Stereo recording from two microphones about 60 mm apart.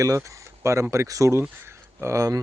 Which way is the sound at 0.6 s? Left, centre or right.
Right.